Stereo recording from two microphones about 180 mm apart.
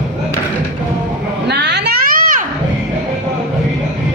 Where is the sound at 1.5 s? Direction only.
70° right (ahead or behind); by 2.4 s 50° right (ahead or behind).